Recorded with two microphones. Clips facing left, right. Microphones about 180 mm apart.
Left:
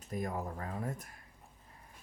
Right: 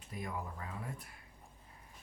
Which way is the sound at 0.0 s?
45° left (ahead or behind).